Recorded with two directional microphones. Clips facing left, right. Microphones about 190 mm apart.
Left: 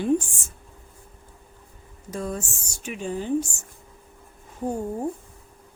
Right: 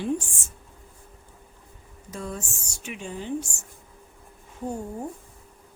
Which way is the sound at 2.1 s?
45° left (ahead or behind).